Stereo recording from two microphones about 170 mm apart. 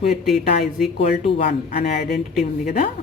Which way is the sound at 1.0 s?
40° left (ahead or behind).